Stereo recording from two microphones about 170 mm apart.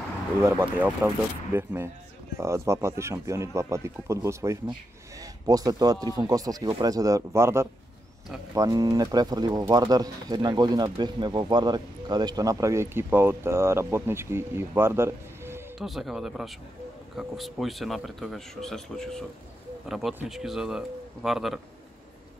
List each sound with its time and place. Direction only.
0.4 s speech: 15° right (ahead or behind)
15.8 s speech: centre (ahead or behind)